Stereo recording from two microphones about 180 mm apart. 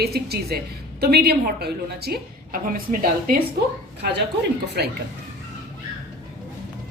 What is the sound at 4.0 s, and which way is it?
Speech, 70° right (ahead or behind).